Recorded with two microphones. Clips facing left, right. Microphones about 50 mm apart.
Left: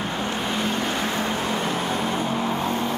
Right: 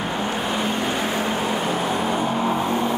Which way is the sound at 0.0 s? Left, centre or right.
Centre.